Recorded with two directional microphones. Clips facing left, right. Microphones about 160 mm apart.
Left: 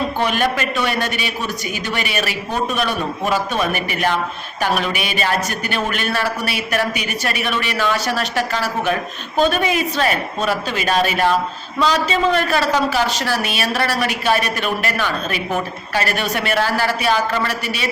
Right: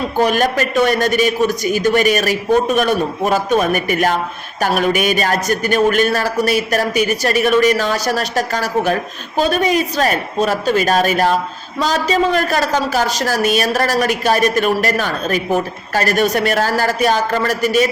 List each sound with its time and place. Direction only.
0.2 s a man's voice: 45° right (ahead or behind)